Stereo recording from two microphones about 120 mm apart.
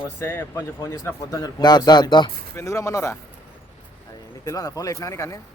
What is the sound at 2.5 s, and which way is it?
Speech, 25° left (ahead or behind).